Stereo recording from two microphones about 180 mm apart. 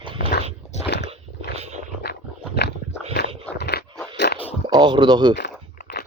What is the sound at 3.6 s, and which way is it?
Dog, 65° left (ahead or behind).